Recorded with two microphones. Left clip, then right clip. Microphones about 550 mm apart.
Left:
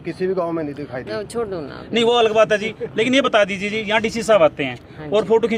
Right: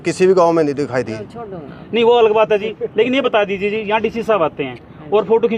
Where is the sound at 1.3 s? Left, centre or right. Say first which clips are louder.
Left 7 dB; left.